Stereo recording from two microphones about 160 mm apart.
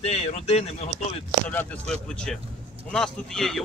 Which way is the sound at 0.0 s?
40° left (ahead or behind).